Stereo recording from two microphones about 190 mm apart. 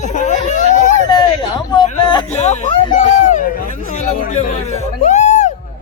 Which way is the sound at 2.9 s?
40° left (ahead or behind).